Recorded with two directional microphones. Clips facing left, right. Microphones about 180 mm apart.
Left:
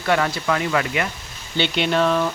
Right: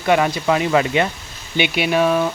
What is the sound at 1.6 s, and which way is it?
Speech, 10° right (ahead or behind).